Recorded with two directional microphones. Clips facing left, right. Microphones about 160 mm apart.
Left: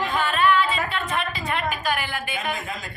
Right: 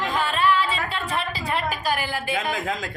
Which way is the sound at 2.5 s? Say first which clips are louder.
Right 4 dB; 90° right.